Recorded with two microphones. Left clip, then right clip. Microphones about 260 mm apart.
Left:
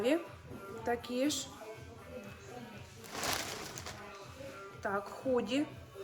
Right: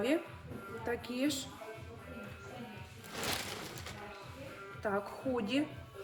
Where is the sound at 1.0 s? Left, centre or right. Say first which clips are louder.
Left 1 dB; centre.